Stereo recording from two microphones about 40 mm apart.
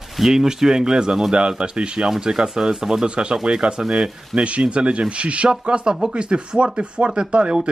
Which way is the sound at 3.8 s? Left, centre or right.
Centre.